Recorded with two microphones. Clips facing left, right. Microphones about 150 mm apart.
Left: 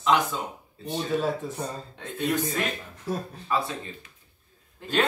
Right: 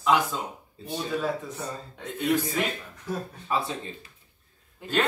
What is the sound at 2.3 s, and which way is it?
Speech, centre (ahead or behind).